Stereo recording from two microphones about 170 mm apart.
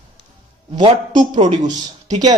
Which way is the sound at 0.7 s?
30° right (ahead or behind).